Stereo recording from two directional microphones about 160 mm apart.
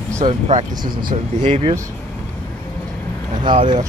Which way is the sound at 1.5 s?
35° right (ahead or behind).